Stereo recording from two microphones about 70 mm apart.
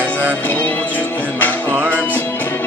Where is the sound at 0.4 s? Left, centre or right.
Left.